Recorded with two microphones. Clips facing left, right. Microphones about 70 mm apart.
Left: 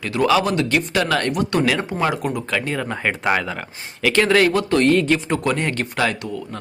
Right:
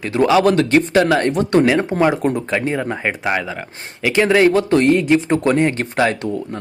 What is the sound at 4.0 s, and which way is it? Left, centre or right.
Speech, centre.